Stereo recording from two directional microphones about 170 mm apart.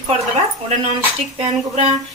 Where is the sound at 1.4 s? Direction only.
40° right (ahead or behind).